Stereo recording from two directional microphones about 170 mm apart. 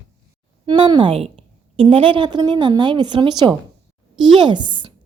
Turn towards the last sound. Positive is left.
turn(degrees=-30)  # may be behind; listen again after turning